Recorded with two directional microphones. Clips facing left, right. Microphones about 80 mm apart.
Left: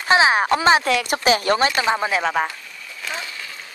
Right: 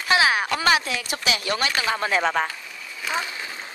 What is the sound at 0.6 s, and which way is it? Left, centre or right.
Speech, left.